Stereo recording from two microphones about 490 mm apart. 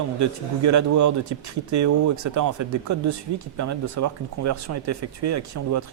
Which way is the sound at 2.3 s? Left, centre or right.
Right.